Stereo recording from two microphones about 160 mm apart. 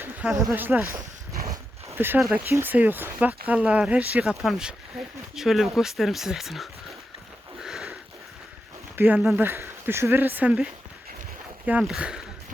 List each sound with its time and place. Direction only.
0.0 s speech: 5° right (ahead or behind)
1.5 s dog: 15° right (ahead or behind)
2.1 s speech: 5° right (ahead or behind)
7.6 s sniff: 5° right (ahead or behind)
9.0 s speech: 10° right (ahead or behind)